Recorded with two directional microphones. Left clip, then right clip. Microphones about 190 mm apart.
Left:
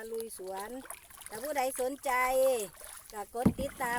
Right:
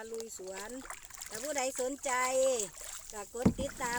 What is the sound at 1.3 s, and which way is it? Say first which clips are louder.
Speech: left 3 dB; 20° left (ahead or behind).